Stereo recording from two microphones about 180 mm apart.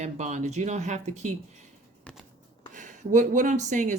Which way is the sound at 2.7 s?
45° right (ahead or behind).